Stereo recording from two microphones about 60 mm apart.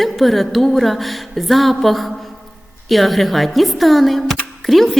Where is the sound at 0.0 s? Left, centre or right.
Centre.